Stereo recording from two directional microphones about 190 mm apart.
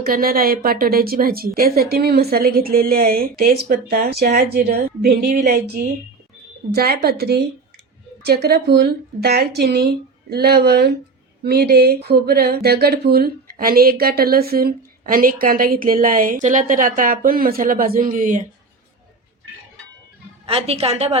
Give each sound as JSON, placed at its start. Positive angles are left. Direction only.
{"t": 0.0, "sound": "speech", "side_deg": -50}
{"t": 20.5, "sound": "a woman's voice", "side_deg": -30}